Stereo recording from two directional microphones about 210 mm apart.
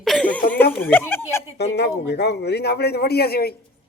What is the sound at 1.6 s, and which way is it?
A man's voice, 50° left (ahead or behind).